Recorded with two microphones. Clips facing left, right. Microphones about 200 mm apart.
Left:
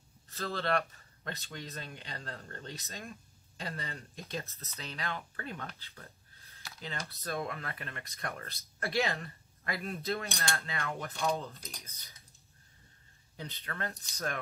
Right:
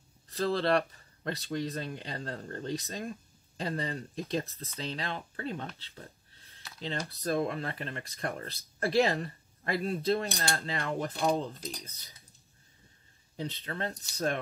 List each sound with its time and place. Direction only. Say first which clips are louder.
0.3 s speech: right 6 dB; 35° right (ahead or behind)
13.4 s speech: right 5 dB; 30° right (ahead or behind)